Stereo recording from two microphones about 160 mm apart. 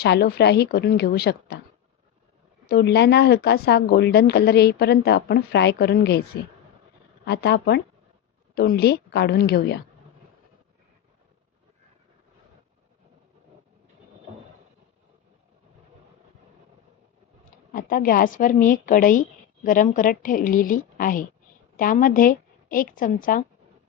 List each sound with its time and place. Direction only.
0.0 s speech: 85° left
2.6 s speech: 90° left
7.3 s speech: 90° left
17.7 s a woman's voice: 60° left (ahead or behind)